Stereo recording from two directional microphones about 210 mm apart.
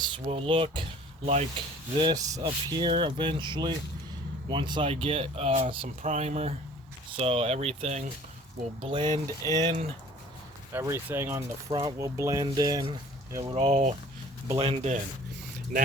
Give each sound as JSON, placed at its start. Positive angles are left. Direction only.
{"t": 0.0, "sound": "speech", "side_deg": -25}
{"t": 10.7, "sound": "speech", "side_deg": -10}
{"t": 13.6, "sound": "speech", "side_deg": -30}
{"t": 15.7, "sound": "speech", "side_deg": -40}